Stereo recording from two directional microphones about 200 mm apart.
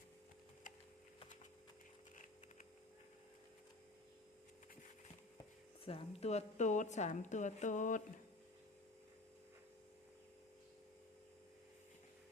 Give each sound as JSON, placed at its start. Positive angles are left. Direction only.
{"t": 5.8, "sound": "a woman's voice", "side_deg": 30}